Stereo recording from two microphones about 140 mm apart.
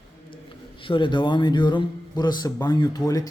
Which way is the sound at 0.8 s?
35° left (ahead or behind).